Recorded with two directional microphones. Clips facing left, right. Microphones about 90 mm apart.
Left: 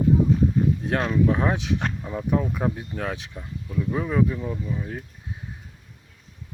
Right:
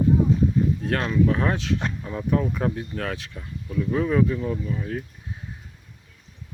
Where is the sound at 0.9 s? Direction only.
15° left (ahead or behind).